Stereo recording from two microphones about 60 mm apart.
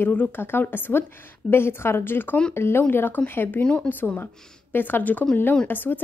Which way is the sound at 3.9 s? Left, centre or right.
Left.